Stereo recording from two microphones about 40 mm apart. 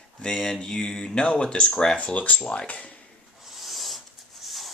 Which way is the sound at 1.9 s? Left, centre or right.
Left.